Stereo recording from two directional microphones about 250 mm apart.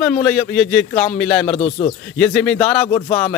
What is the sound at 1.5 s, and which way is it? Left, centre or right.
Speech, left.